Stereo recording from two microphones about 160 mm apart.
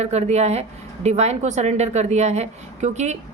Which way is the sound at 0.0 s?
40° right (ahead or behind).